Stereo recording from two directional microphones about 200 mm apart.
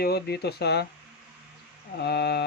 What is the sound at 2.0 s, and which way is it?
Speech, 55° left (ahead or behind).